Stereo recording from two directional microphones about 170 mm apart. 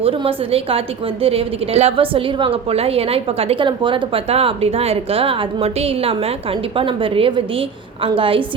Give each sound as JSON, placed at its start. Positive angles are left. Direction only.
{"t": 0.0, "sound": "a woman's voice", "side_deg": -30}